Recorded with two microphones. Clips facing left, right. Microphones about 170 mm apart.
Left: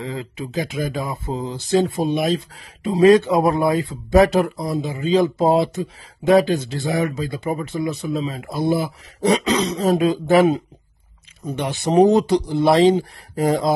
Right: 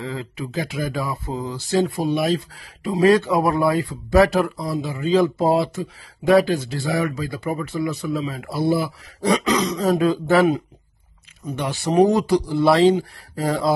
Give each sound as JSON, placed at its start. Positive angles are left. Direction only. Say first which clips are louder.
{"t": 0.0, "sound": "speech", "louder": "left 1 dB", "side_deg": 20}